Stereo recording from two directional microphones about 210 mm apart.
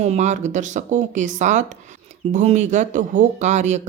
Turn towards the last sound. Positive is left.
turn(degrees=-35)  # may be behind; listen again after turning